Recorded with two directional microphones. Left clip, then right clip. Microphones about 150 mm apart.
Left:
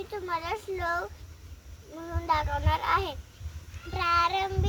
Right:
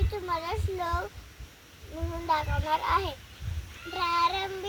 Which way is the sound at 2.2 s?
Centre (ahead or behind).